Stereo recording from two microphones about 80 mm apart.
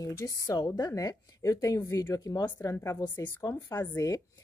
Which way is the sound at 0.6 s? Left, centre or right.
Left.